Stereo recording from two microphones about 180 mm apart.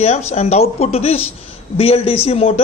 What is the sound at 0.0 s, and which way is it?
A man's voice, 35° left (ahead or behind).